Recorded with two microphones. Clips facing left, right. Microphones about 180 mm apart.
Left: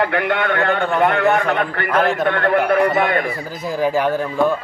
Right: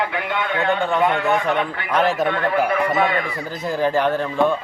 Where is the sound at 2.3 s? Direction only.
60° left (ahead or behind).